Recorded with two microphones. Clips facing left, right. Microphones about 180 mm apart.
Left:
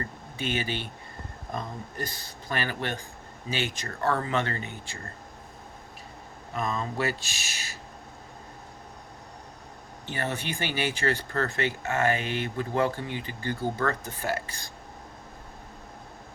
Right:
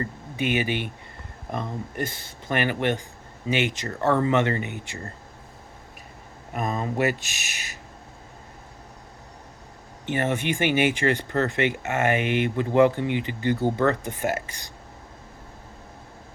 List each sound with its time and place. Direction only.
0.0 s speech: 15° right (ahead or behind)
6.5 s speech: 50° right (ahead or behind)
6.9 s speech: 20° right (ahead or behind)
10.1 s speech: 20° right (ahead or behind)